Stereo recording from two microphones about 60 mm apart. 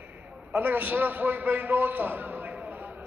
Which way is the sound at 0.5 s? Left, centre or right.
Right.